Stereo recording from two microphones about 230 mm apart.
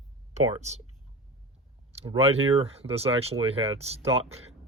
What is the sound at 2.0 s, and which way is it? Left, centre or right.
Speech, right.